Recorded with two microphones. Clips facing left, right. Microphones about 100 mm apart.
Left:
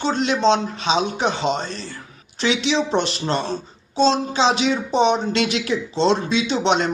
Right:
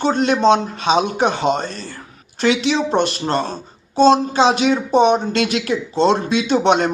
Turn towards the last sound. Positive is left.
turn(degrees=-50)  # may be behind; listen again after turning